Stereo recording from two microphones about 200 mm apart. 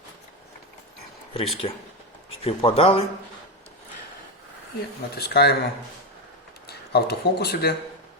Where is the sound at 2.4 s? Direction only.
30° left (ahead or behind).